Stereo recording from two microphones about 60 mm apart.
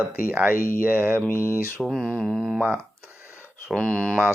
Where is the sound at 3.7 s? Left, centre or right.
Centre.